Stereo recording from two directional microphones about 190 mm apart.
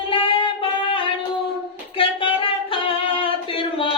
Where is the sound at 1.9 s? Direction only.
30° left (ahead or behind).